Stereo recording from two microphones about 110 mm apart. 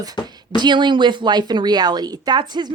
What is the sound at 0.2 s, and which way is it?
Speech, 40° left (ahead or behind).